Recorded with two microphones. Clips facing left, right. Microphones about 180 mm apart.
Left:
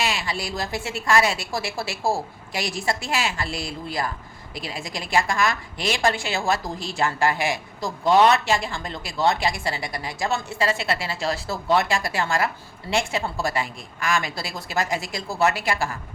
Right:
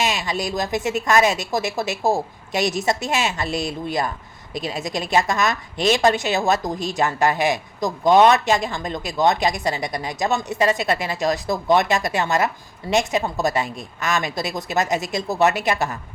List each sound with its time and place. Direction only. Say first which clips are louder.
0.0 s a woman's voice: right 4 dB; 20° right (ahead or behind)